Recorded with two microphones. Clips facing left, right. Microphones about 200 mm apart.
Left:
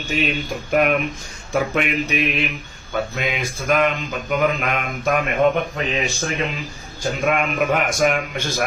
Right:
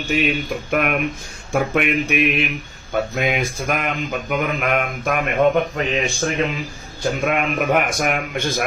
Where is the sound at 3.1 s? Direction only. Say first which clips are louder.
Right 4 dB; 50° right (ahead or behind).